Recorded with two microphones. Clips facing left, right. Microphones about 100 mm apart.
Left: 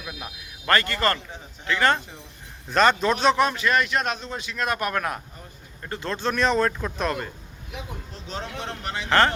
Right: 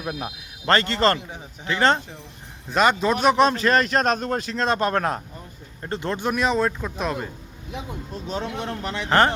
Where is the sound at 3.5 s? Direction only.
35° right (ahead or behind); by 7.1 s centre (ahead or behind).